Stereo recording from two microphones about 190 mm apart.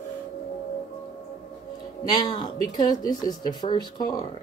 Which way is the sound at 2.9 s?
20° left (ahead or behind).